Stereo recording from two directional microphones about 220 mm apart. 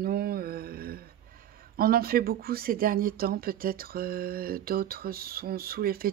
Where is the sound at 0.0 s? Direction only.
45° right (ahead or behind).